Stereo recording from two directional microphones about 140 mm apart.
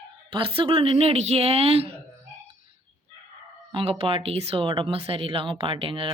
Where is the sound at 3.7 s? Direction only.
40° right (ahead or behind).